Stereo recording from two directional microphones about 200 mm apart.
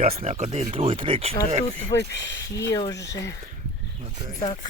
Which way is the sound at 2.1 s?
60° left (ahead or behind).